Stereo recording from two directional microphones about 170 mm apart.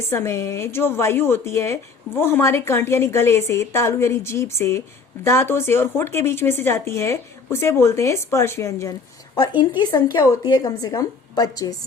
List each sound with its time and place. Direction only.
0.1 s a woman's voice: 15° left (ahead or behind)
9.3 s a woman's voice: 25° left (ahead or behind)